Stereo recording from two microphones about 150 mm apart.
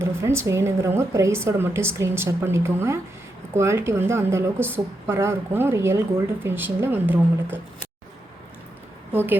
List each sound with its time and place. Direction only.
0.0 s a woman's voice: 15° right (ahead or behind)
9.1 s a woman's voice: 15° right (ahead or behind)